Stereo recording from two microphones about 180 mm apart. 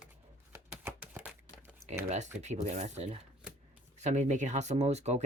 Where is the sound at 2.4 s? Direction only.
40° right (ahead or behind).